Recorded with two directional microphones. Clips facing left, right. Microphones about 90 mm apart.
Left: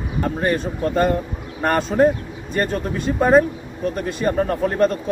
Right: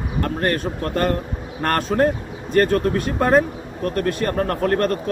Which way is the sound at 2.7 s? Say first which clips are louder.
Right 3 dB; 60° right (ahead or behind).